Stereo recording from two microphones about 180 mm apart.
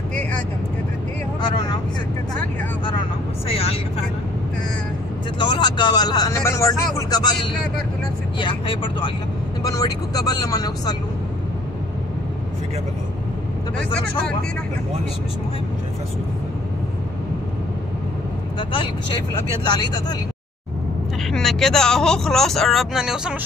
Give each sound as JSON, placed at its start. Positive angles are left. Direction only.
{"t": 1.5, "sound": "vehicle", "side_deg": 25}
{"t": 3.4, "sound": "speech", "side_deg": 35}
{"t": 5.4, "sound": "speech", "side_deg": 25}
{"t": 8.4, "sound": "speech", "side_deg": 25}
{"t": 18.6, "sound": "speech", "side_deg": 30}
{"t": 21.3, "sound": "speech", "side_deg": 0}